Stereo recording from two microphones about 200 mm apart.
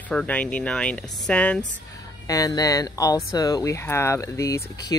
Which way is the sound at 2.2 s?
15° left (ahead or behind).